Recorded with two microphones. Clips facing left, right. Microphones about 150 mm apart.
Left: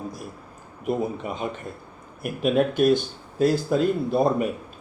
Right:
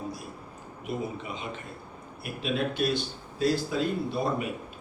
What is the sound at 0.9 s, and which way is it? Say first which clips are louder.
Speech: left 7 dB; 45° left (ahead or behind).